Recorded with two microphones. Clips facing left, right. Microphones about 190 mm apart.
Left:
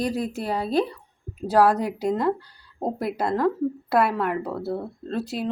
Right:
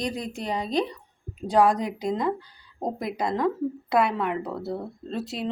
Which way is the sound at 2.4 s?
5° left (ahead or behind).